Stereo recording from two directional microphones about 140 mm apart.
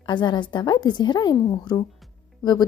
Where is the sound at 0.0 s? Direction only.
35° left (ahead or behind).